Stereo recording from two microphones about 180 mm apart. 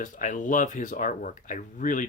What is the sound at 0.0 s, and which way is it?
Speech, 45° left (ahead or behind).